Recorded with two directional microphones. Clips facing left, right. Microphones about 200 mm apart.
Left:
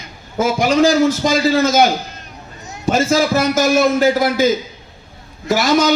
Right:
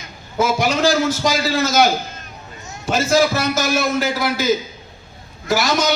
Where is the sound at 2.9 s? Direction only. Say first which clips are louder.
Left 1 dB; 50° left (ahead or behind).